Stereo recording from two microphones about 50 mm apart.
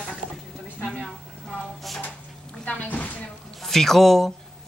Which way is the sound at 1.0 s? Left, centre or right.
Centre.